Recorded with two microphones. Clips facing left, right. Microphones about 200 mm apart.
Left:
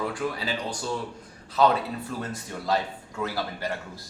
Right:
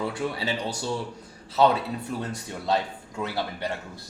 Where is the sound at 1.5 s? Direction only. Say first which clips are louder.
Right 1 dB; 20° right (ahead or behind).